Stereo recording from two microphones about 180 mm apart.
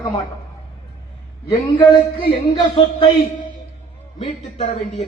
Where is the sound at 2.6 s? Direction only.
30° left (ahead or behind).